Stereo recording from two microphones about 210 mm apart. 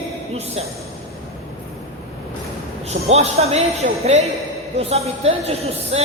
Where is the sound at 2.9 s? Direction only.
30° right (ahead or behind).